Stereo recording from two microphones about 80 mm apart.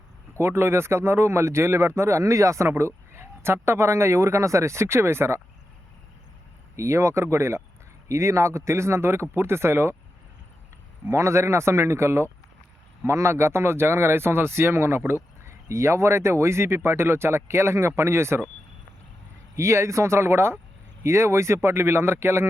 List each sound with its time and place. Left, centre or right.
0.3 s a man's voice: right
6.7 s a man's voice: right
11.1 s a man's voice: right
19.5 s a man's voice: right